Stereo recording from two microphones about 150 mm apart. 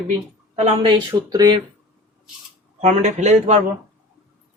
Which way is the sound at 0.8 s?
30° right (ahead or behind).